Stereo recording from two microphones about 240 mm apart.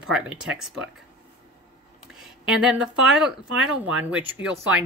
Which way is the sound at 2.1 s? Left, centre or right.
Centre.